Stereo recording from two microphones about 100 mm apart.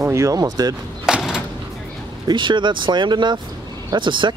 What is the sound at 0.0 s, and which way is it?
Speech, 30° right (ahead or behind).